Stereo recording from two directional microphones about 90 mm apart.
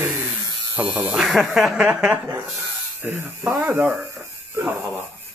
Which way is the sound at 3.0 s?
25° right (ahead or behind).